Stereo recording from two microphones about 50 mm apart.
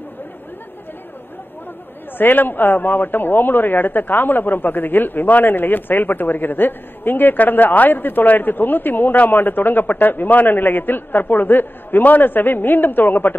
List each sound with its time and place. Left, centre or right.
2.1 s a man's voice: left